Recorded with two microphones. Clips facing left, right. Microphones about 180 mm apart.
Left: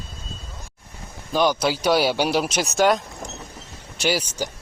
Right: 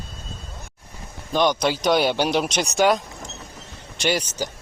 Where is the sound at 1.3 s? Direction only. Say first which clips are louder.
Even; 5° left (ahead or behind).